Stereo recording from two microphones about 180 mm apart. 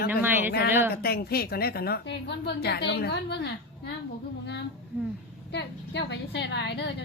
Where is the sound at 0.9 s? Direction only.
60° left (ahead or behind).